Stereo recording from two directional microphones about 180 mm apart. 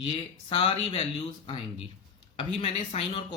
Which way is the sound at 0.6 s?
30° left (ahead or behind).